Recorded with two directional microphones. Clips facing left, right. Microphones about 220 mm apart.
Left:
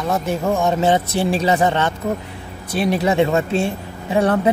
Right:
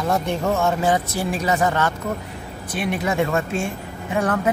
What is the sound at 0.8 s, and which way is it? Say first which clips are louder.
Speech: left 4 dB; 25° left (ahead or behind).